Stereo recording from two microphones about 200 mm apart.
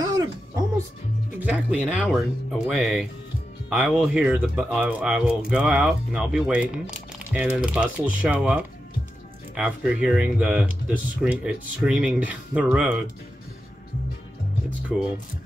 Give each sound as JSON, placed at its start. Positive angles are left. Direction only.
{"t": 0.0, "sound": "music", "side_deg": -15}
{"t": 1.4, "sound": "speech", "side_deg": -5}
{"t": 14.9, "sound": "speech", "side_deg": 0}